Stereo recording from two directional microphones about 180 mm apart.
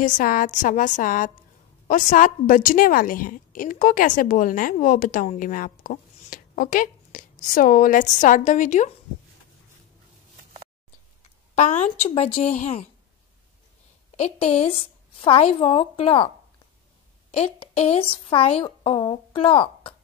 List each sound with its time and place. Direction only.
0.0 s a woman's voice: 50° left (ahead or behind)
11.5 s a woman's voice: 40° left (ahead or behind)
14.1 s a woman's voice: 35° left (ahead or behind)
17.3 s a woman's voice: 35° left (ahead or behind)